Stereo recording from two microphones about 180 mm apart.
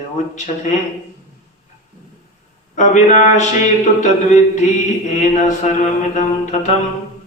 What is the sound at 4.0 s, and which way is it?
Mantra, 40° left (ahead or behind).